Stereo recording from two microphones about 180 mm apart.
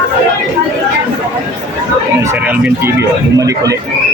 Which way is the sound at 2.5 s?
10° right (ahead or behind).